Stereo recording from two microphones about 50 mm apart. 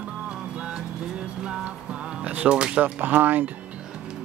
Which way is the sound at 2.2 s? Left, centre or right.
Right.